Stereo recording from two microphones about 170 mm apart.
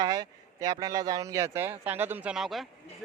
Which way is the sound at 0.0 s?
20° right (ahead or behind).